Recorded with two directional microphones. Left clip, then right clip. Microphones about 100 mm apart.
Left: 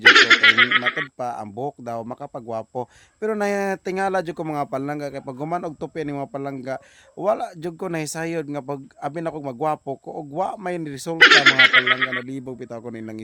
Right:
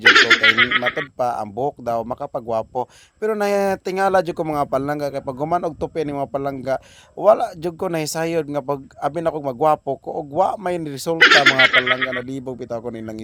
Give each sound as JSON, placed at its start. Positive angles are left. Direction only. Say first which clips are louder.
{"t": 0.0, "sound": "snicker", "louder": "even", "side_deg": 0}
{"t": 0.9, "sound": "speech", "louder": "right 5 dB", "side_deg": -20}
{"t": 11.2, "sound": "snicker", "louder": "even", "side_deg": 0}
{"t": 12.3, "sound": "speech", "louder": "right 5 dB", "side_deg": -15}